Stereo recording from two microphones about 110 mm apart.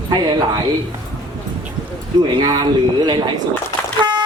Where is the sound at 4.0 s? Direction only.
40° right (ahead or behind).